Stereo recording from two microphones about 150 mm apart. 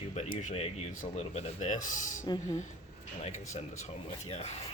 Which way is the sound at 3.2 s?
50° left (ahead or behind).